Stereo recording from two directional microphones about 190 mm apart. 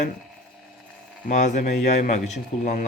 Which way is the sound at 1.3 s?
40° left (ahead or behind).